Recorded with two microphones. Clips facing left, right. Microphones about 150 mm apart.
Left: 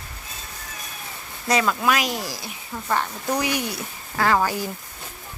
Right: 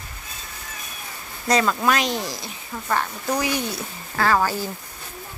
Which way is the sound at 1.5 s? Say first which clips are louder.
Right 1 dB; 5° left (ahead or behind).